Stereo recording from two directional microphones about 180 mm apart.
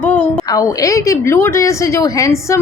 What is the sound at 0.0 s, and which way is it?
A woman's voice, 10° left (ahead or behind).